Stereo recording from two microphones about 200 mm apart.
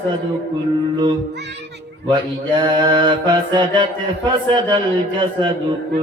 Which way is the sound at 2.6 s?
25° right (ahead or behind).